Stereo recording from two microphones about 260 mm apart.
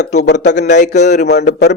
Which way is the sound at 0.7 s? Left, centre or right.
Left.